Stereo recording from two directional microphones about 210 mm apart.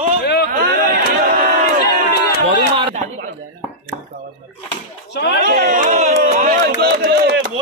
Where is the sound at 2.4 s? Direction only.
30° right (ahead or behind).